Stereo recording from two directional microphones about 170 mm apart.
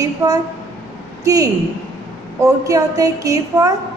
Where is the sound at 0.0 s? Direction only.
20° right (ahead or behind).